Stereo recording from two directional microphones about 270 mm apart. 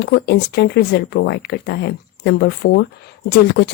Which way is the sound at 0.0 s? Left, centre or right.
Left.